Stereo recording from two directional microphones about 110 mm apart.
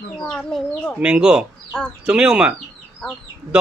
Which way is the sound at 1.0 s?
10° right (ahead or behind).